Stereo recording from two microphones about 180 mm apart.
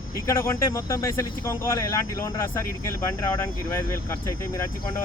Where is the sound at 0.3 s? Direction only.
15° left (ahead or behind).